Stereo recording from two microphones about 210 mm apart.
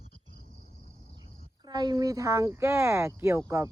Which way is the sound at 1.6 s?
20° right (ahead or behind).